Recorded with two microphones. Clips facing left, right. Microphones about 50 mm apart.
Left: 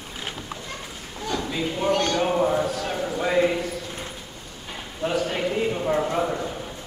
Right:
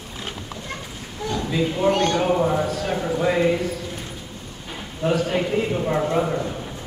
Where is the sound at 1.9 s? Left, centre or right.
Right.